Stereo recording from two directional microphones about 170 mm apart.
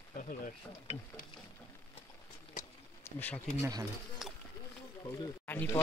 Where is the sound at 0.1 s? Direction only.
50° left (ahead or behind).